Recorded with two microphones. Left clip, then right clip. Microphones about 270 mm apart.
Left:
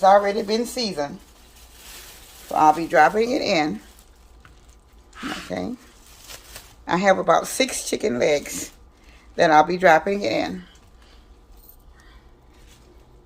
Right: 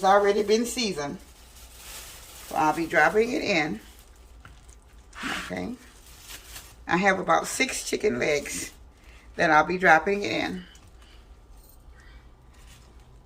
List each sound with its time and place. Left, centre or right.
0.0 s speech: centre
2.6 s speech: left
5.5 s speech: left
6.8 s speech: left